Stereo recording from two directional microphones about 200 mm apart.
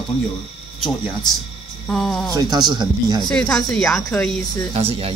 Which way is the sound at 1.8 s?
Centre (ahead or behind).